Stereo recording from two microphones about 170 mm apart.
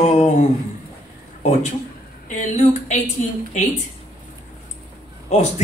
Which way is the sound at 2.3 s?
45° left (ahead or behind).